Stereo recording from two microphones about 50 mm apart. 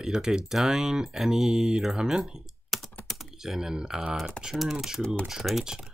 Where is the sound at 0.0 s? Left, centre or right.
Centre.